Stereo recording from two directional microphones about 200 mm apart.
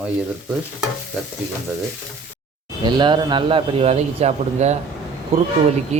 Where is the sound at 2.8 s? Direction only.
20° right (ahead or behind).